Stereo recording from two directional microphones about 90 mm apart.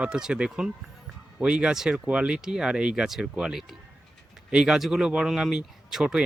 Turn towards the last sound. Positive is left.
turn(degrees=-5)  # may be behind; listen again after turning